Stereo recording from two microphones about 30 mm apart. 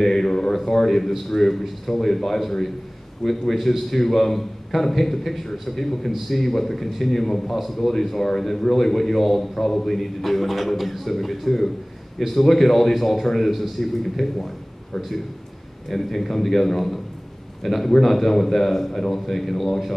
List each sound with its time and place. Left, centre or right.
0.0 s a sound: centre
0.5 s a man's voice: centre
7.6 s a man's voice: centre
15.9 s a man's voice: centre